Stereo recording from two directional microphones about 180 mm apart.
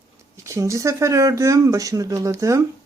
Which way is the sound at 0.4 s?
15° right (ahead or behind).